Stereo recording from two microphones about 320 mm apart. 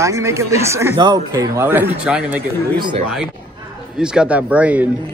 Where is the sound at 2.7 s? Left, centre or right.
Centre.